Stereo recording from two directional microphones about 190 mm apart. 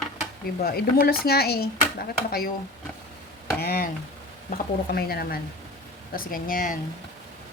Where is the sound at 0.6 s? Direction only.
55° left (ahead or behind).